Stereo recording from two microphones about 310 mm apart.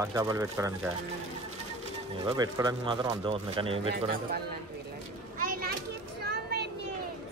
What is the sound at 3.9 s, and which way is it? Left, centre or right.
Speech, right.